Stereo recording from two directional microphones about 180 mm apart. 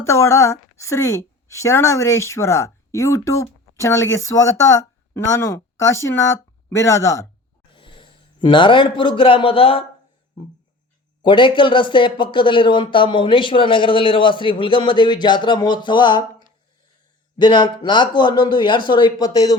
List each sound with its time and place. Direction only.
0.0 s a woman's voice: 15° left (ahead or behind)
7.7 s a man's voice: 30° left (ahead or behind)
11.2 s speech: 25° left (ahead or behind)
17.3 s speech: 25° left (ahead or behind)